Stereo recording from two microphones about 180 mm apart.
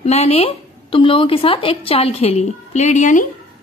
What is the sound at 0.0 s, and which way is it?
Speech, 35° left (ahead or behind).